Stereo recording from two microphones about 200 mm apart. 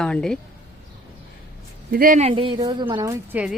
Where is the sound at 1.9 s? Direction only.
45° right (ahead or behind).